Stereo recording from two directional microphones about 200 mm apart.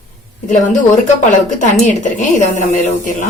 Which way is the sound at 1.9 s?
40° left (ahead or behind).